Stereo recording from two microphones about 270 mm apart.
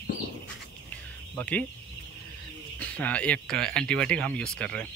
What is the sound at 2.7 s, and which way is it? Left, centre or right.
Speech, centre.